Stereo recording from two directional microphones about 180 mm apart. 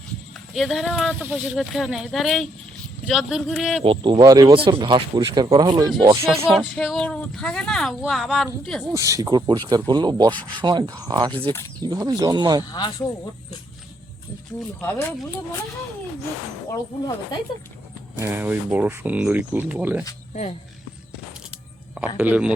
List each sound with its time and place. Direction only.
0.5 s a woman's voice: centre (ahead or behind)
3.8 s speech: 25° right (ahead or behind)
6.3 s a woman's voice: centre (ahead or behind)
8.9 s speech: 15° right (ahead or behind)
12.7 s speech: 20° left (ahead or behind)
14.8 s speech: 10° left (ahead or behind)
18.2 s speech: 10° right (ahead or behind)
20.3 s speech: 40° left (ahead or behind)
21.9 s speech: 5° right (ahead or behind)